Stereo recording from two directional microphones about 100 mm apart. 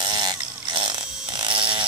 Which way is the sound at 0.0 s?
45° right (ahead or behind).